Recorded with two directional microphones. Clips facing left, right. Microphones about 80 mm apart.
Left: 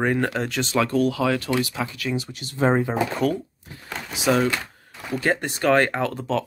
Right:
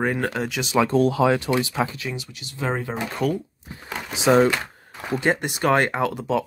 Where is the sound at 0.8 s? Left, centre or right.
Right.